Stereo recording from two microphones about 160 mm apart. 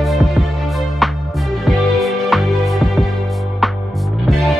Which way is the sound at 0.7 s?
Centre (ahead or behind).